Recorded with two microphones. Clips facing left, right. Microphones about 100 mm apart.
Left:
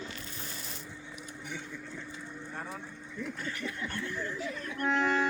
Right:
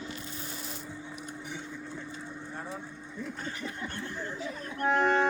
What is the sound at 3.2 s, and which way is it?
Music, 35° right (ahead or behind).